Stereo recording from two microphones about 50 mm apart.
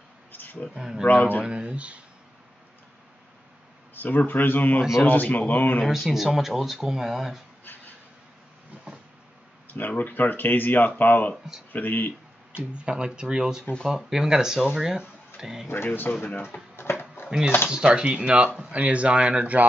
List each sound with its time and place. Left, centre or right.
0.3 s a sound: left
0.7 s speech: centre
1.0 s speech: left
1.4 s speech: centre
3.9 s speech: left
6.1 s speech: centre
7.6 s a sound: left
9.8 s speech: left
12.7 s speech: centre
15.7 s speech: left
16.7 s a sound: left
17.3 s speech: centre